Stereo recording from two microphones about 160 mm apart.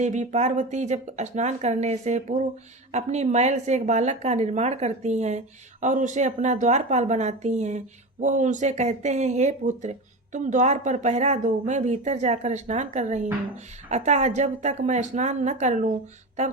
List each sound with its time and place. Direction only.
0.0 s speech: 50° right (ahead or behind)